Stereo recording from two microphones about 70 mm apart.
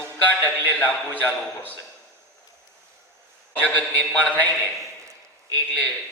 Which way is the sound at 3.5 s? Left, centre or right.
Left.